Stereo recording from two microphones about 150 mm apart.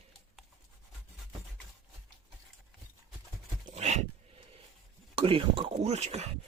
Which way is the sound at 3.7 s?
50° right (ahead or behind).